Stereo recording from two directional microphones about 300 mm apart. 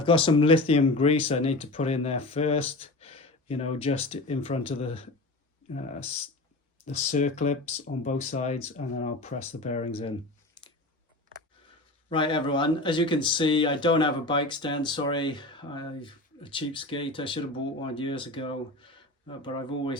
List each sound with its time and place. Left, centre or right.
0.0 s speech: centre
12.0 s speech: centre